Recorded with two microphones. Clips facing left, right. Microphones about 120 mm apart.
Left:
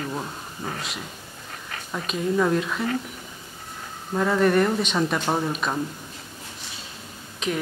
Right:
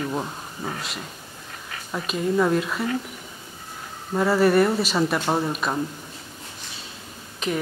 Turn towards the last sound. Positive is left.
turn(degrees=0)  # may be behind; listen again after turning